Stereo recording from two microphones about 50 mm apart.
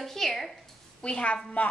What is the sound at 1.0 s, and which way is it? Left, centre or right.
Speech, left.